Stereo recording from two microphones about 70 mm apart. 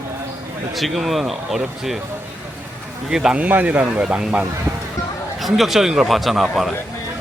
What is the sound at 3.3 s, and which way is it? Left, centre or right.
Speech, right.